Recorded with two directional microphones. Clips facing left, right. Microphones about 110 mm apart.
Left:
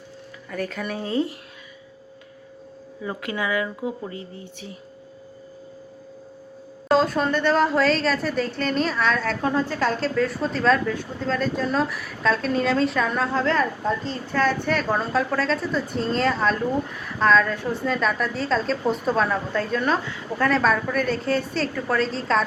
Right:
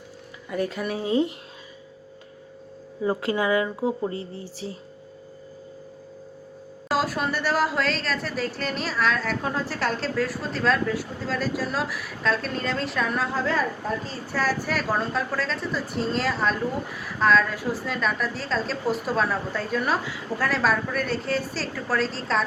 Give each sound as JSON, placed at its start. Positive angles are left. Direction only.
{"t": 0.5, "sound": "speech", "side_deg": -15}
{"t": 3.0, "sound": "speech", "side_deg": -30}
{"t": 6.8, "sound": "a woman's voice", "side_deg": -5}